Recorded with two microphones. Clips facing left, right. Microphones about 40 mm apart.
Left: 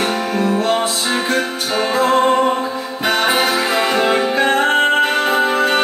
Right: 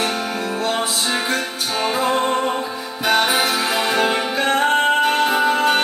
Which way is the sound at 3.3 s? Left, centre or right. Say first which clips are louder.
Left 3 dB; centre.